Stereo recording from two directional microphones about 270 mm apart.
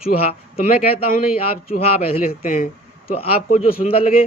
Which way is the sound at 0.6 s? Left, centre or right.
Left.